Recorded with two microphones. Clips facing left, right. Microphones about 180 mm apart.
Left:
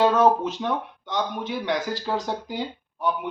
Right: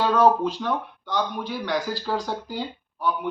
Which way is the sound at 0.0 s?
20° left (ahead or behind).